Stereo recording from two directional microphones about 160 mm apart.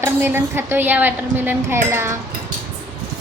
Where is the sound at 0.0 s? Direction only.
15° right (ahead or behind).